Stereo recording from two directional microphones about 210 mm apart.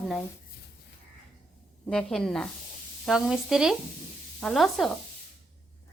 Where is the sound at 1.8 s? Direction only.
5° left (ahead or behind).